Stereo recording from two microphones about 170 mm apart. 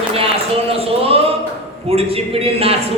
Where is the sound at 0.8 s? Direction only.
35° right (ahead or behind).